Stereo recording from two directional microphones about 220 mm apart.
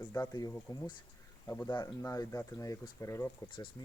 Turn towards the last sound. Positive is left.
turn(degrees=20)  # may be behind; listen again after turning